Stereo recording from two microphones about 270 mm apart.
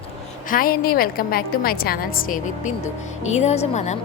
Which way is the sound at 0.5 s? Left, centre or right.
Left.